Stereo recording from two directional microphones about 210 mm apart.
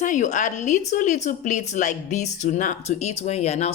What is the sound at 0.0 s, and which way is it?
A woman's voice, 35° left (ahead or behind).